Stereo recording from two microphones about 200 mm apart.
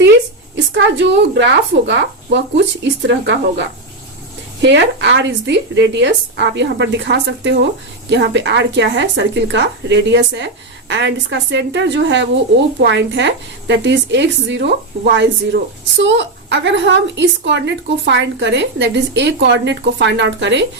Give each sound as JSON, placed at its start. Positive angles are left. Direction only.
{"t": 0.5, "sound": "a woman's voice", "side_deg": -60}